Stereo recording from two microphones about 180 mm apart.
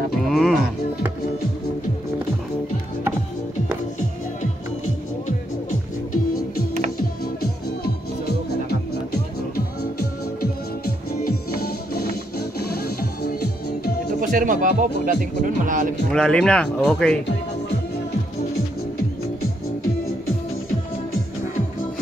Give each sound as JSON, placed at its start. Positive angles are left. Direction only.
{"t": 0.1, "sound": "music", "side_deg": 0}
{"t": 7.8, "sound": "music", "side_deg": 60}
{"t": 10.4, "sound": "music", "side_deg": 60}
{"t": 14.2, "sound": "speech", "side_deg": -45}
{"t": 16.1, "sound": "speech", "side_deg": 5}